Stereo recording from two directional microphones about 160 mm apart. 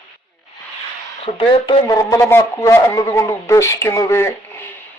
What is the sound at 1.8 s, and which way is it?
A man's voice, 20° left (ahead or behind).